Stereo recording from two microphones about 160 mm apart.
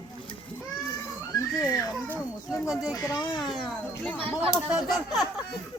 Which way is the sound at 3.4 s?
Centre (ahead or behind).